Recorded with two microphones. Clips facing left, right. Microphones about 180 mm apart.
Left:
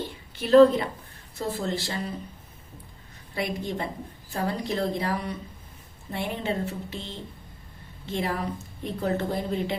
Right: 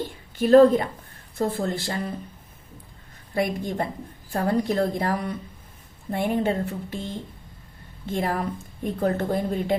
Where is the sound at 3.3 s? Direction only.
50° right (ahead or behind).